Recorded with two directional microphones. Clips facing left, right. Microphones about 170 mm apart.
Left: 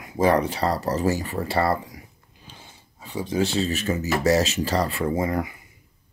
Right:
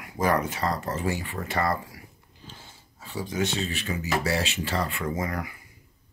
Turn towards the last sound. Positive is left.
turn(degrees=25)  # may be behind; listen again after turning